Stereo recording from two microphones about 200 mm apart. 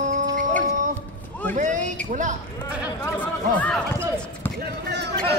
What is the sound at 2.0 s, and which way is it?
Speech, 40° right (ahead or behind).